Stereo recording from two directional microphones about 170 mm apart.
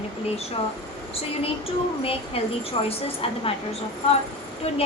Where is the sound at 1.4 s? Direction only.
35° left (ahead or behind).